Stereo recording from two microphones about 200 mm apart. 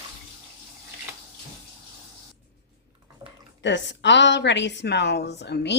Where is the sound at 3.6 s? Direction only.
65° left (ahead or behind).